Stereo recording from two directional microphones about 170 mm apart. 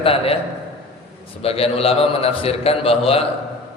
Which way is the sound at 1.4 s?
35° left (ahead or behind).